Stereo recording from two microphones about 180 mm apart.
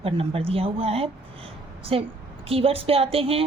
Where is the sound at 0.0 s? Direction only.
30° right (ahead or behind).